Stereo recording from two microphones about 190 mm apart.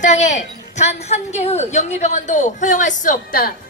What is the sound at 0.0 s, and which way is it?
A woman's voice, 40° left (ahead or behind).